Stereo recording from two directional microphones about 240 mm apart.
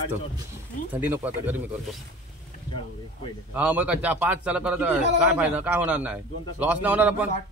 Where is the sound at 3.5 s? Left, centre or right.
Centre.